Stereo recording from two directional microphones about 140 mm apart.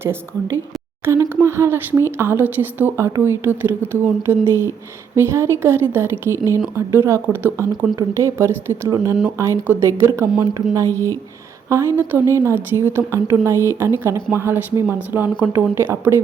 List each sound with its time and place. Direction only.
0.0 s a woman's voice: 15° right (ahead or behind)